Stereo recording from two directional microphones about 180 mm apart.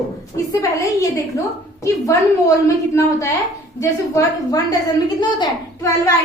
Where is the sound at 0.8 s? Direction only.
20° left (ahead or behind).